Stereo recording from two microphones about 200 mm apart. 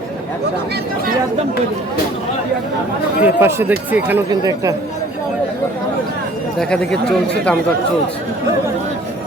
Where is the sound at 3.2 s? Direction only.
10° right (ahead or behind).